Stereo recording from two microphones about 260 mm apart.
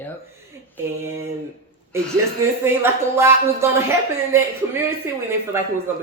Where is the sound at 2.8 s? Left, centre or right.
Centre.